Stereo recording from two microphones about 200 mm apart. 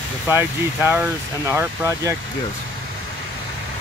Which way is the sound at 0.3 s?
10° right (ahead or behind).